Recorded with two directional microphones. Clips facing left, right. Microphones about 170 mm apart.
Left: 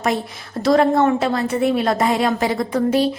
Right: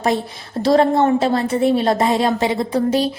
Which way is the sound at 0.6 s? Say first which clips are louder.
Right 1 dB; 30° right (ahead or behind).